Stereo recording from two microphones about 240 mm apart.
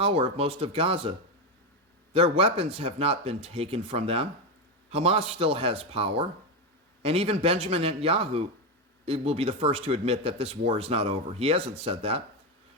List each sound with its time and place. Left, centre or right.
0.0 s speech: right
2.1 s speech: right